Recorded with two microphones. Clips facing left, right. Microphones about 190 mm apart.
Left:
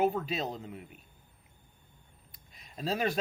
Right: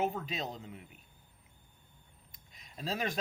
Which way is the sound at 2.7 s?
40° left (ahead or behind).